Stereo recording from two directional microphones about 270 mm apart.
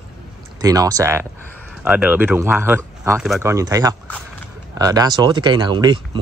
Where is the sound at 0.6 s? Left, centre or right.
Centre.